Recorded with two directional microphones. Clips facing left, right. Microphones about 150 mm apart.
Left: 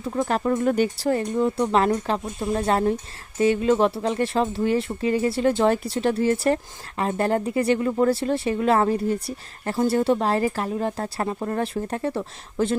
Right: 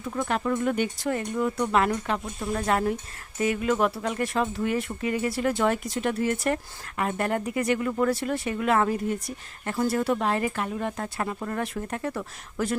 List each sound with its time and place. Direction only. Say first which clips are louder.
0.0 s speech: left 4 dB; 35° left (ahead or behind)